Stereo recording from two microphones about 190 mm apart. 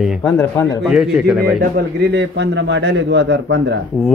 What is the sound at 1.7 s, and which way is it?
A man's voice, 65° right (ahead or behind).